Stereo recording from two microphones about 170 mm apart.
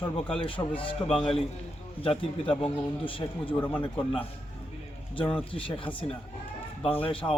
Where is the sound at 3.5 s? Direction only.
10° left (ahead or behind).